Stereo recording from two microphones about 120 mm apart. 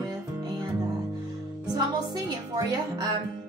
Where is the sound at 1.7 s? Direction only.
35° right (ahead or behind).